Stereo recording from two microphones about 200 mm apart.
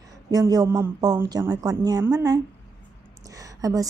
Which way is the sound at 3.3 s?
15° right (ahead or behind).